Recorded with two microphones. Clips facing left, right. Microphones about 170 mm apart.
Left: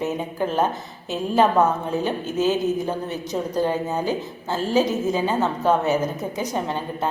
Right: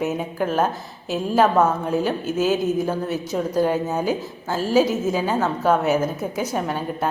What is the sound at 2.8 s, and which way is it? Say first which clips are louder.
Speech: right 2 dB; 15° left (ahead or behind).